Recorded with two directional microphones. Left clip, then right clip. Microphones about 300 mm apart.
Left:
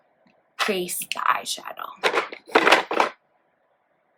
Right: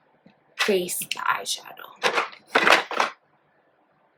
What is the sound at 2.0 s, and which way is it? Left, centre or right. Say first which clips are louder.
Crushing: even; left.